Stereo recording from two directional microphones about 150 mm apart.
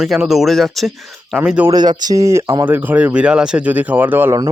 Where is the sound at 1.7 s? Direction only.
25° right (ahead or behind).